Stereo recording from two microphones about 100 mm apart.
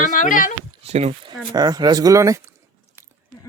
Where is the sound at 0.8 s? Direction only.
90° right.